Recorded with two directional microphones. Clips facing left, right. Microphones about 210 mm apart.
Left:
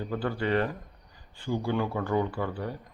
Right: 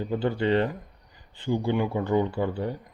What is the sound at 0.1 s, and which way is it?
Speech, 25° right (ahead or behind).